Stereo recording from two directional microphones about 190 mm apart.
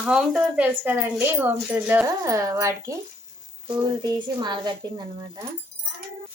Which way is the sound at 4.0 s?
20° right (ahead or behind).